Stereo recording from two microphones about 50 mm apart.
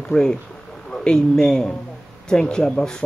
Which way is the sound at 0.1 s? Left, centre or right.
Centre.